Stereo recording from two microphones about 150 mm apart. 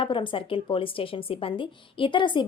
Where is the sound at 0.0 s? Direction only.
35° left (ahead or behind).